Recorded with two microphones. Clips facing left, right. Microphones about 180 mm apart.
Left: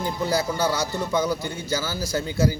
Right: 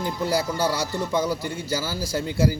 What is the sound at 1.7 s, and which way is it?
Speech, 10° right (ahead or behind).